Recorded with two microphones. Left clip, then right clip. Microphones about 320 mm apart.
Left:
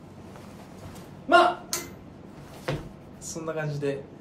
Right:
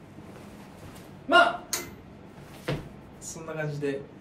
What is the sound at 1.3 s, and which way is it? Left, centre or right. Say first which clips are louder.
Speech: left 1 dB; centre.